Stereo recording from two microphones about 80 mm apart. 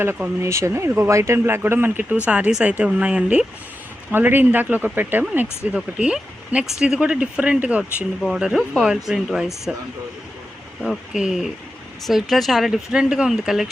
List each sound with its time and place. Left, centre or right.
0.4 s speech: right; by 3.4 s centre
4.1 s speech: right; by 9.7 s centre
10.8 s speech: centre